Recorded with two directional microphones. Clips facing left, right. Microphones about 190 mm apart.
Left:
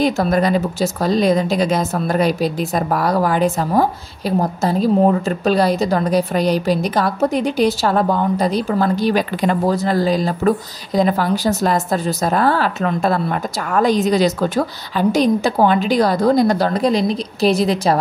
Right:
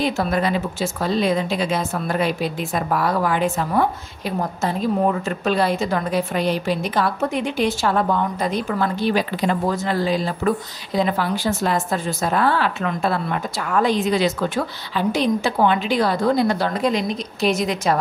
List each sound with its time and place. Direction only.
0.0 s a woman's voice: 40° left (ahead or behind)